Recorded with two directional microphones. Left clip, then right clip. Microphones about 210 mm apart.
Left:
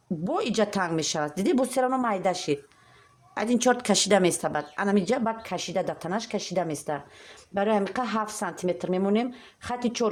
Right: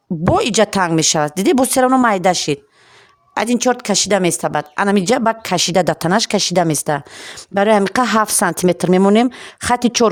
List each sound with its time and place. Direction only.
0.3 s speech: 45° right (ahead or behind)
3.6 s a woman's voice: 30° right (ahead or behind); by 10.1 s 60° right (ahead or behind)